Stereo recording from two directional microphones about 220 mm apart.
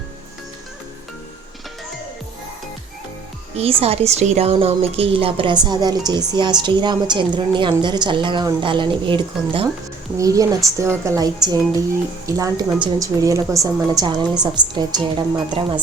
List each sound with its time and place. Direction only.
3.5 s a woman's voice: 25° right (ahead or behind)